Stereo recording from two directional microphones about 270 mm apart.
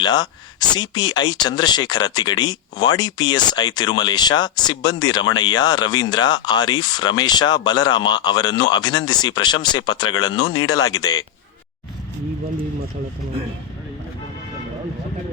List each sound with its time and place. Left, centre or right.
0.0 s speech: centre